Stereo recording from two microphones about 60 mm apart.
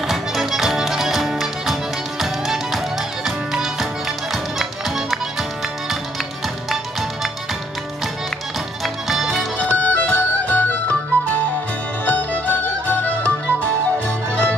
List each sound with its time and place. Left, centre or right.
0.0 s music: centre
8.8 s music: centre
9.8 s music: left